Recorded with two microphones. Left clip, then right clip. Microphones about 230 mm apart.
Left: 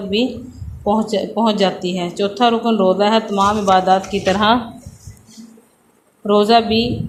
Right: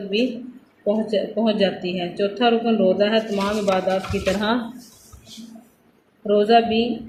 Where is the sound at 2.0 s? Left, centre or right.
Centre.